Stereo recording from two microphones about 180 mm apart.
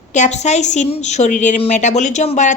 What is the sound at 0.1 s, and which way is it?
A woman's voice, 40° left (ahead or behind).